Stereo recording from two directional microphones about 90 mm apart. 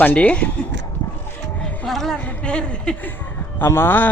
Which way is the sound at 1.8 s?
5° left (ahead or behind).